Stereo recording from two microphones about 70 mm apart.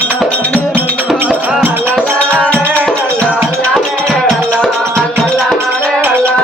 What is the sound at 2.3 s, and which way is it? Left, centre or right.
Music, centre.